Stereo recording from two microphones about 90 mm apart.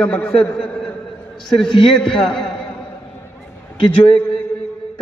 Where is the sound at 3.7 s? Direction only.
85° left.